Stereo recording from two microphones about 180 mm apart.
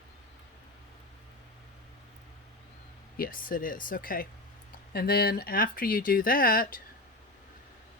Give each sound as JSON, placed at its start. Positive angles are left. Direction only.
{"t": 3.2, "sound": "speech", "side_deg": 50}